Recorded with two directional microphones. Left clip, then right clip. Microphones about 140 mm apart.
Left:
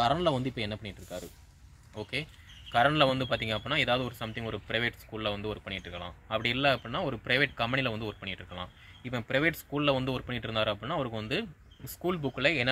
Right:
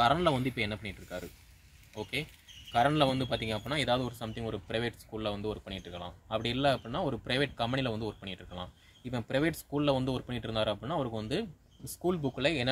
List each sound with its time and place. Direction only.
0.0 s speech: centre (ahead or behind)
2.7 s speech: 20° left (ahead or behind)
3.6 s speech: 10° right (ahead or behind)